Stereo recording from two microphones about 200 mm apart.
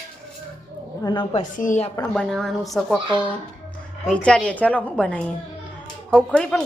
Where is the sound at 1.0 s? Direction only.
25° left (ahead or behind).